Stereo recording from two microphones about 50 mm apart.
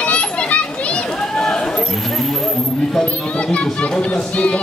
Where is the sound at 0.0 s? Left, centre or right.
Left.